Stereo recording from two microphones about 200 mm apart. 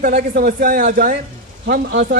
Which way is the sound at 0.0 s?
45° right (ahead or behind).